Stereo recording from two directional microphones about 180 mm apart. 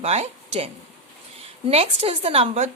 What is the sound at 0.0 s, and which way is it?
Speech, 35° right (ahead or behind).